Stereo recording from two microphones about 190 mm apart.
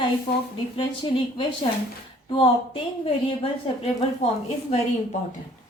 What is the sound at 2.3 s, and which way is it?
A woman's voice, 30° left (ahead or behind).